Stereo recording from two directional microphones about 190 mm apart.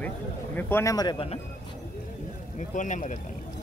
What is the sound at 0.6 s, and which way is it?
Speech, 10° left (ahead or behind).